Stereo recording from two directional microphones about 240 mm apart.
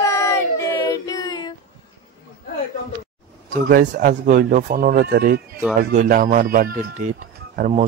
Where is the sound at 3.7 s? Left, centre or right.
Right.